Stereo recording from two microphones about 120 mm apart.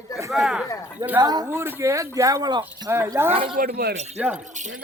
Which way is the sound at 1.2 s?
35° right (ahead or behind).